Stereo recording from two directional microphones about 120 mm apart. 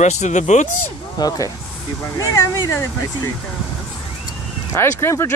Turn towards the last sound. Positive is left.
turn(degrees=25)  # may be behind; listen again after turning